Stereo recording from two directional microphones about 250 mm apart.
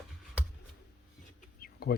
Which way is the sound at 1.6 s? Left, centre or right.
Left.